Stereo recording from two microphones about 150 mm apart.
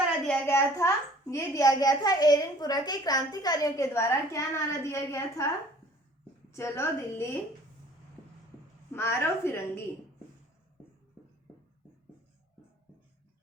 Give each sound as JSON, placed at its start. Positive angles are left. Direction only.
{"t": 0.3, "sound": "a child's voice", "side_deg": 15}
{"t": 6.5, "sound": "a woman's voice", "side_deg": 20}
{"t": 8.9, "sound": "a woman's voice", "side_deg": 15}